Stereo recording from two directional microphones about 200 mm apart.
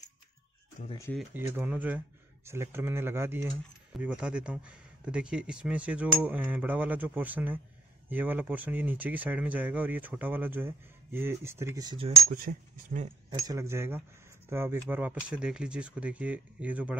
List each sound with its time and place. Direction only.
1.3 s speech: 10° right (ahead or behind)
12.3 s speech: 40° right (ahead or behind)
13.3 s speech: 15° right (ahead or behind)